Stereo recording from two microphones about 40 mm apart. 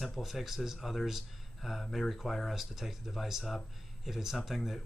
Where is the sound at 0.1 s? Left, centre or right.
Centre.